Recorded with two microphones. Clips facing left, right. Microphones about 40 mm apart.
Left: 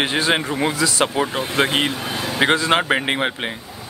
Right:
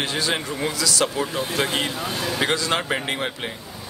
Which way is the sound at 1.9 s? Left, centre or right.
Centre.